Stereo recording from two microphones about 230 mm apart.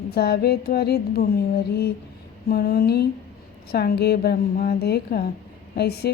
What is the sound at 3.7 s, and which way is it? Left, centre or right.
A woman's voice, left.